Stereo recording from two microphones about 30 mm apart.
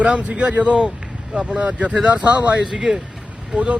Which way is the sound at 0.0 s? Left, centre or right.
Right.